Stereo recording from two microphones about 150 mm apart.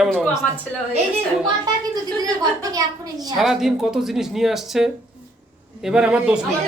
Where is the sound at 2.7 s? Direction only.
25° right (ahead or behind).